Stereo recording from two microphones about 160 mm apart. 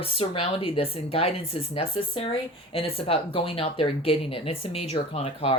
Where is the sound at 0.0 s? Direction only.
35° left (ahead or behind).